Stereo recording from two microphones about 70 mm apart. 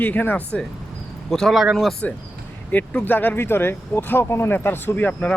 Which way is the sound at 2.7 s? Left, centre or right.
Left.